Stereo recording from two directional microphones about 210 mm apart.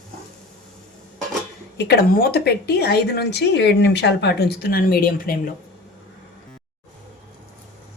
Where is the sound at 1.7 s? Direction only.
50° left (ahead or behind).